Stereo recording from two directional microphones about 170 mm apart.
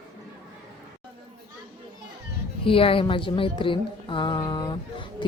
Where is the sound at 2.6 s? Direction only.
30° left (ahead or behind).